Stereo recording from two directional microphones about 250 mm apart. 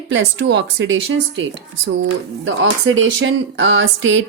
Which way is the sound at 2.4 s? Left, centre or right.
Right.